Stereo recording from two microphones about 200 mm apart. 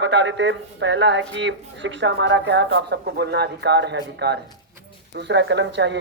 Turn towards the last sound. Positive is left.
turn(degrees=-60)  # may be behind; listen again after turning